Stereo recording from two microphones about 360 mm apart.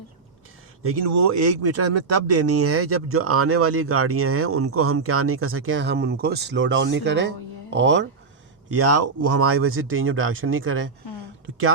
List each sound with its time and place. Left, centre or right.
0.8 s speech: right
8.7 s speech: right